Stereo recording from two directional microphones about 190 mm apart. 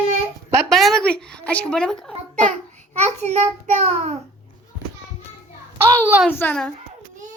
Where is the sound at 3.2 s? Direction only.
35° right (ahead or behind).